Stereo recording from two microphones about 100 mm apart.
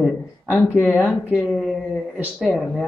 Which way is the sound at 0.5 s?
10° left (ahead or behind).